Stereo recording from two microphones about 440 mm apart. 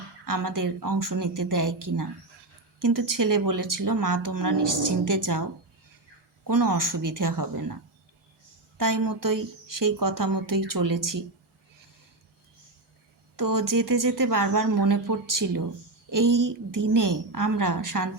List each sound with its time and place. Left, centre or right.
0.3 s speech: right
6.5 s speech: right
8.8 s speech: right
13.3 s speech: right